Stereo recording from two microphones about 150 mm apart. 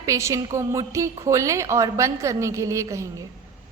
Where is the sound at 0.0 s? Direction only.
20° right (ahead or behind).